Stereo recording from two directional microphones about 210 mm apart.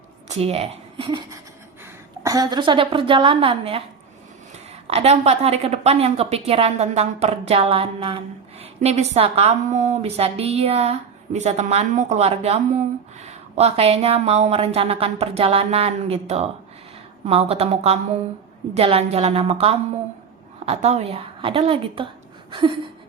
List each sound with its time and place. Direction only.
0.3 s speech: 30° right (ahead or behind)
2.2 s a woman's voice: 15° right (ahead or behind)
4.9 s a woman's voice: 30° right (ahead or behind)